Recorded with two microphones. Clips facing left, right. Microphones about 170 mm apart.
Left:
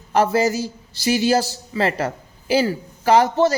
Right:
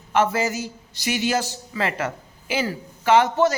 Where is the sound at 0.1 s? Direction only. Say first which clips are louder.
Left 4 dB; 35° left (ahead or behind).